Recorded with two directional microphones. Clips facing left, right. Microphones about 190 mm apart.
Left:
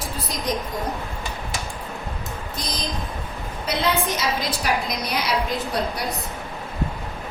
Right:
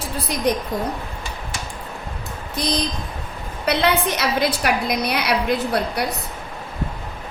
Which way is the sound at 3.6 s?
65° right (ahead or behind).